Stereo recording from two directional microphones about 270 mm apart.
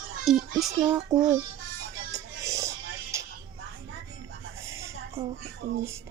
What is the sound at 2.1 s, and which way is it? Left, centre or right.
Music, centre.